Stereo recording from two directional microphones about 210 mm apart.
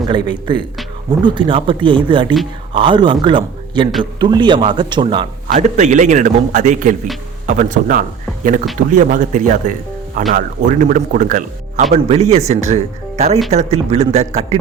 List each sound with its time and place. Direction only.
0.1 s speech: 20° right (ahead or behind)
5.5 s speech: 35° right (ahead or behind)